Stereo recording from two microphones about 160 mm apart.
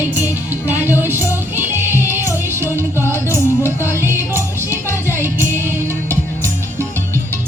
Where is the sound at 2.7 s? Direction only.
15° right (ahead or behind).